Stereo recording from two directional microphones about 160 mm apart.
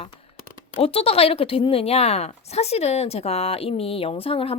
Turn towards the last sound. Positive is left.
turn(degrees=35)  # may be behind; listen again after turning